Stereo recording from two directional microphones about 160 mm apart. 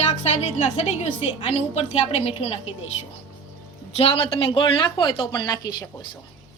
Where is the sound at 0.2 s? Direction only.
40° left (ahead or behind).